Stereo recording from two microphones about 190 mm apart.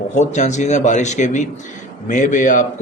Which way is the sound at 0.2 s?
40° left (ahead or behind).